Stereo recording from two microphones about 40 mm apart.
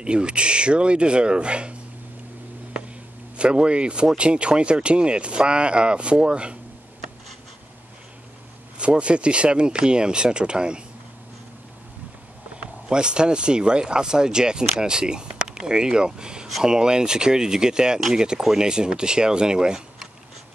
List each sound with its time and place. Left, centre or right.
0.0 s speech: right
3.3 s speech: right
8.7 s speech: right
12.5 s speech: right